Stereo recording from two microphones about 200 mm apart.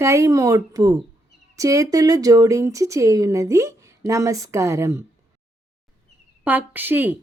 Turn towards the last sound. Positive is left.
turn(degrees=-10)  # may be behind; listen again after turning